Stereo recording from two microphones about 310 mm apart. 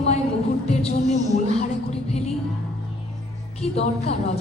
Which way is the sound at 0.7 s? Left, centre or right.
Left.